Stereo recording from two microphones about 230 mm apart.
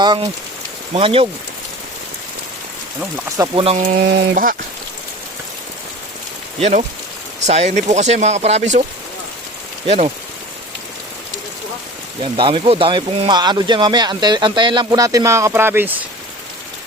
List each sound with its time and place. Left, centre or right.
0.0 s speech: centre
3.3 s speech: centre
3.9 s a sound: right
6.6 s speech: right
9.8 s speech: right
12.2 s speech: right